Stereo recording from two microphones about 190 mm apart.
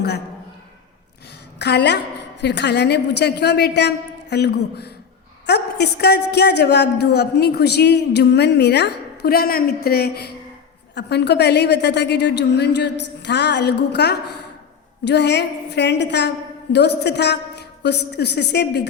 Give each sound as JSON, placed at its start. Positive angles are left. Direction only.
{"t": 1.5, "sound": "a woman's voice", "side_deg": 60}